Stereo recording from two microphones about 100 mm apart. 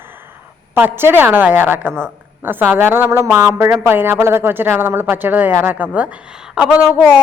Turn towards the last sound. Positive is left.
turn(degrees=-10)  # may be behind; listen again after turning